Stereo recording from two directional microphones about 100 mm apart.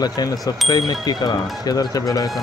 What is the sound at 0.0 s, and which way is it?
Speech, 40° left (ahead or behind).